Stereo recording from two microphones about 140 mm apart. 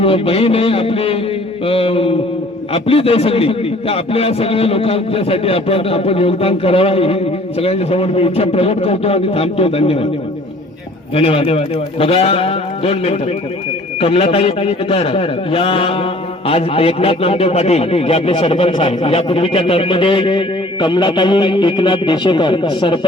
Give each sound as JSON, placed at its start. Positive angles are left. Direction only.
{"t": 0.0, "sound": "a man's voice", "side_deg": 45}
{"t": 11.1, "sound": "a man's voice", "side_deg": 45}